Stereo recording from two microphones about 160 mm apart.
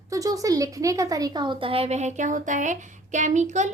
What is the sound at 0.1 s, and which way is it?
Speech, 20° right (ahead or behind).